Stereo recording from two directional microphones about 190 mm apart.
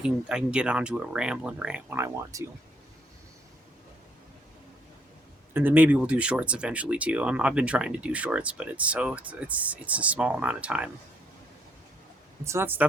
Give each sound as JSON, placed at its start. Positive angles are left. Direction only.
{"t": 0.0, "sound": "speech", "side_deg": -5}
{"t": 5.5, "sound": "speech", "side_deg": -10}
{"t": 12.5, "sound": "speech", "side_deg": -10}